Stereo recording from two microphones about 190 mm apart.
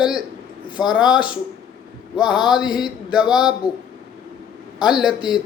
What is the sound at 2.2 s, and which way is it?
Speech, 5° right (ahead or behind).